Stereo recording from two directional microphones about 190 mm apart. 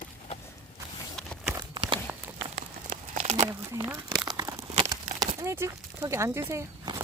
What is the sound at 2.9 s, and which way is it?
Crumpling, 40° right (ahead or behind).